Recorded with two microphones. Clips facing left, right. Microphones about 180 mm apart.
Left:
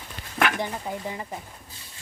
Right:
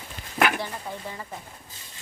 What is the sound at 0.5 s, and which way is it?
Speech, 15° left (ahead or behind).